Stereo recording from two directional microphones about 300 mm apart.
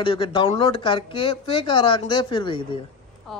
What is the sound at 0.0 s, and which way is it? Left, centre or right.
Speech, centre.